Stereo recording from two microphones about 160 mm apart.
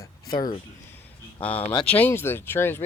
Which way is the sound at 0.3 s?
25° left (ahead or behind).